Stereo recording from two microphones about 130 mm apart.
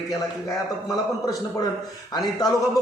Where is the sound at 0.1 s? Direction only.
25° left (ahead or behind).